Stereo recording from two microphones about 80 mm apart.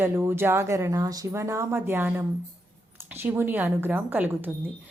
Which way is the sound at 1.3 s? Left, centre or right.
Right.